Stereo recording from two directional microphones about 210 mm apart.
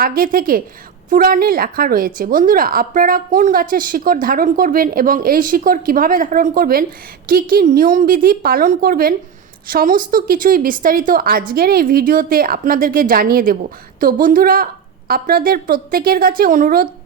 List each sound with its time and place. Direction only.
0.0 s a woman's voice: 45° right (ahead or behind)